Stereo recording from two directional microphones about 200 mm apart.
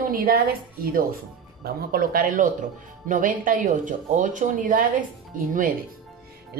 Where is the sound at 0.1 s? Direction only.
45° right (ahead or behind).